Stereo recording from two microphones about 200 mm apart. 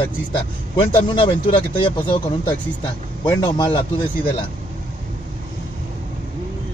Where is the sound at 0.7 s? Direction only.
25° left (ahead or behind).